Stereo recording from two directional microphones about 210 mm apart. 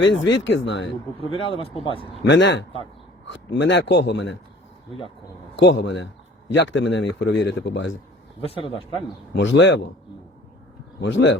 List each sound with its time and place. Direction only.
0.0 s a man's voice: 60° left (ahead or behind)
1.2 s a man's voice: 25° left (ahead or behind)
2.2 s a man's voice: 60° left (ahead or behind)
5.5 s a man's voice: 60° left (ahead or behind)
9.3 s a man's voice: 60° left (ahead or behind)
11.0 s a man's voice: 60° left (ahead or behind)